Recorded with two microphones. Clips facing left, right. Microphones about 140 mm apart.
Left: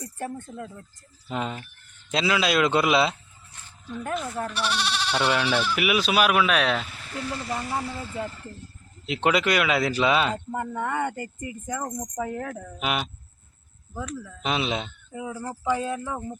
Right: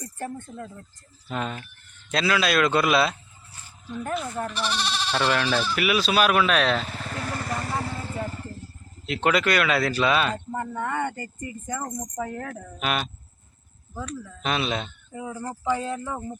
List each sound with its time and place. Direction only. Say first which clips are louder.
0.0 s a man's voice: even; 10° left (ahead or behind)
3.8 s speech: right 1 dB; 5° right (ahead or behind)
6.8 s speech: right 1 dB; 45° right (ahead or behind)
9.0 s speech: even; 20° left (ahead or behind)
14.4 s speech: even; 15° left (ahead or behind)